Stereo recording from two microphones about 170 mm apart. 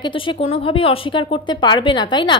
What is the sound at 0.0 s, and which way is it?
A woman's voice, 30° left (ahead or behind).